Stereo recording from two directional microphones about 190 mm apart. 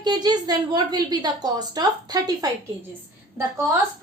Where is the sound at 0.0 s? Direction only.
20° right (ahead or behind).